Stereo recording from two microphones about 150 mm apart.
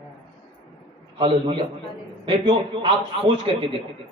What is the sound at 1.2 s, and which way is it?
Speech, 35° right (ahead or behind).